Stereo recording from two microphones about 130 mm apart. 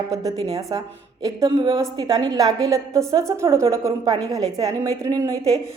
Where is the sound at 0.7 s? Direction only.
35° right (ahead or behind).